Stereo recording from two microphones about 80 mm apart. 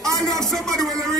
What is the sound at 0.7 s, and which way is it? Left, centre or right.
Music, right.